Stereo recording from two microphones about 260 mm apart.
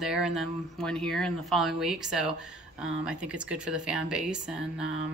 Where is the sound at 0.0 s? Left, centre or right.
Centre.